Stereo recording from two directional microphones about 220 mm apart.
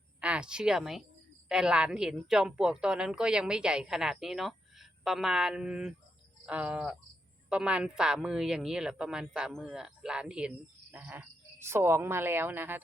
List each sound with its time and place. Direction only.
0.2 s a woman's voice: 5° right (ahead or behind)
10.9 s cricket: 10° right (ahead or behind)